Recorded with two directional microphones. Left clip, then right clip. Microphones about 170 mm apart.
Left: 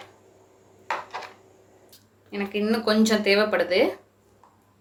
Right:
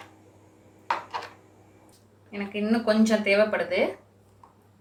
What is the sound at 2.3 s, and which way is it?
Speech, 70° left (ahead or behind).